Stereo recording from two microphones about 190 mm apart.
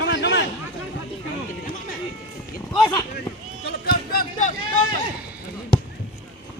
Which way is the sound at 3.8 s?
45° left (ahead or behind).